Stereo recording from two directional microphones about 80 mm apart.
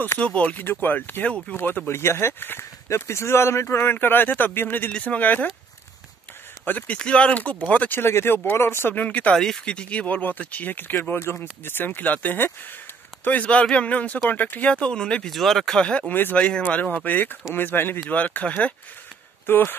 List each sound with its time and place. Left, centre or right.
0.2 s speech: centre
6.6 s speech: left